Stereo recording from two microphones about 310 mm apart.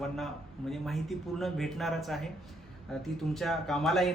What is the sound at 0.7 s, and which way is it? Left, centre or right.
Speech, centre.